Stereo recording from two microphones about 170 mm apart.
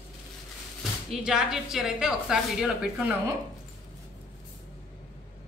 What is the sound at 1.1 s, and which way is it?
A woman's voice, 5° right (ahead or behind).